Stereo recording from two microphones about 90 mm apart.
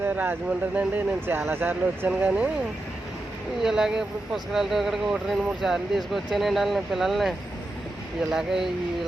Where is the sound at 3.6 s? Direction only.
5° right (ahead or behind).